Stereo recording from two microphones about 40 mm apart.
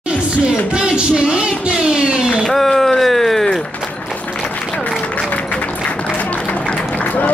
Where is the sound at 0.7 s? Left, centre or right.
Right.